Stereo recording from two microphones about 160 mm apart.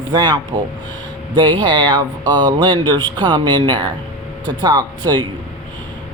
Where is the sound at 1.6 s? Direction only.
25° right (ahead or behind).